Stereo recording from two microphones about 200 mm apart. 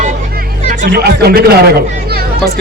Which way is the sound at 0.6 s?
40° right (ahead or behind).